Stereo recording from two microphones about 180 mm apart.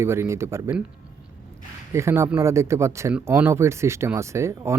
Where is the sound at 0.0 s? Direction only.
15° right (ahead or behind).